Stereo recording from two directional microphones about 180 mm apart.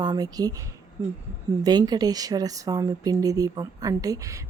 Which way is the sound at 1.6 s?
20° right (ahead or behind).